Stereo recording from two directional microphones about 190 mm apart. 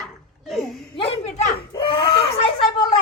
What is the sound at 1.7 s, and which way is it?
Baby cry, 25° left (ahead or behind).